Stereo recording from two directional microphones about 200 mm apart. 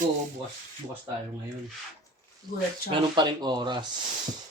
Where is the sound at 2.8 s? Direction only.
25° right (ahead or behind).